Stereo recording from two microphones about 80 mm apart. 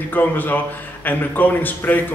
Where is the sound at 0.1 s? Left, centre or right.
Left.